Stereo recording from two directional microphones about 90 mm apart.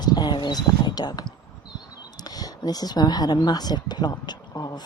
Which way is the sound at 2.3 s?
45° left (ahead or behind).